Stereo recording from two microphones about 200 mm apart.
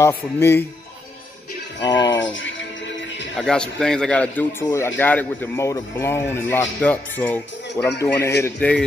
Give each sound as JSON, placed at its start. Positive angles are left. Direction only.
{"t": 0.0, "sound": "speech", "side_deg": 10}
{"t": 1.8, "sound": "speech", "side_deg": 20}
{"t": 2.1, "sound": "speech", "side_deg": 70}
{"t": 3.3, "sound": "speech", "side_deg": 5}